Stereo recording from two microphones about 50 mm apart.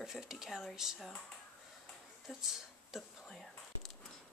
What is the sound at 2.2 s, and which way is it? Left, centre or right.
Speech, centre.